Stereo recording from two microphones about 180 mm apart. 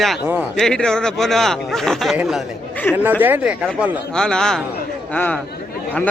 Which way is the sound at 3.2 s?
10° right (ahead or behind).